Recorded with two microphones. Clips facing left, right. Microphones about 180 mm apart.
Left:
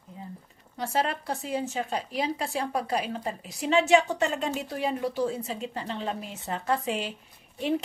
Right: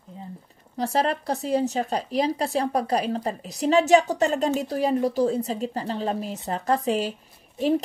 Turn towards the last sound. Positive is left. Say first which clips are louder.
# right 5 dB
turn(degrees=-40)  # may be behind; listen again after turning